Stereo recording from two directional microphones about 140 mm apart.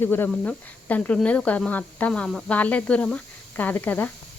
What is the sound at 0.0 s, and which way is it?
A woman's voice, 15° left (ahead or behind).